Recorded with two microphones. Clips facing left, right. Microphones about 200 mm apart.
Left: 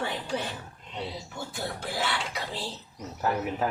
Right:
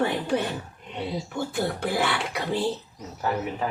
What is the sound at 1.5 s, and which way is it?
Speech, 60° right (ahead or behind).